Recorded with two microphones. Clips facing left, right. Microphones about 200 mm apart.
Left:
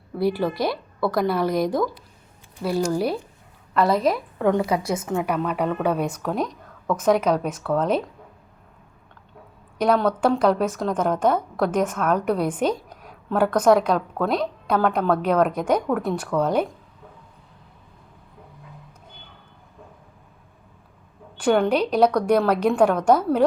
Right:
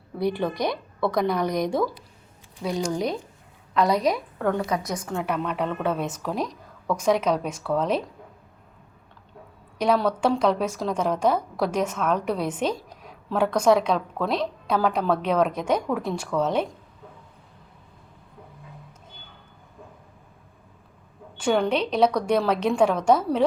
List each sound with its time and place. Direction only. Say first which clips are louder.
0.2 s a woman's voice: left 2 dB; 5° left (ahead or behind)
4.7 s a woman's voice: left 4 dB; 30° left (ahead or behind)
5.0 s a woman's voice: left 3 dB; 10° left (ahead or behind)
6.1 s a woman's voice: left 3 dB; 5° right (ahead or behind)
9.7 s a woman's voice: left 2 dB; centre (ahead or behind)
21.4 s a woman's voice: left 3 dB; 5° left (ahead or behind)